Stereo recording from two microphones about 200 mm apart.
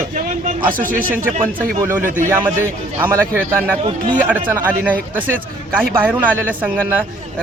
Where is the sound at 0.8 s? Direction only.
45° right (ahead or behind).